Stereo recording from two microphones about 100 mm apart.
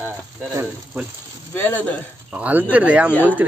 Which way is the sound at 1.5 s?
20° left (ahead or behind).